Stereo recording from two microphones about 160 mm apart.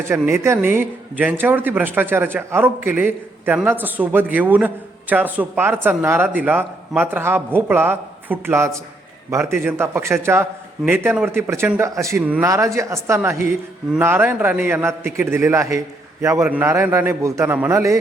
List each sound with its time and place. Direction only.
0.1 s a man's voice: 15° right (ahead or behind)
12.2 s a man's voice: 10° right (ahead or behind)
12.5 s a man's voice: 20° right (ahead or behind)